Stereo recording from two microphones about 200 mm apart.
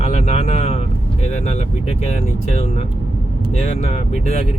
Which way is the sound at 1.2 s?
35° left (ahead or behind).